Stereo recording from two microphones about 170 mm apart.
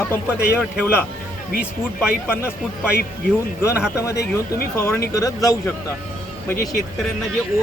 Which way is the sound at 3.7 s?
5° right (ahead or behind).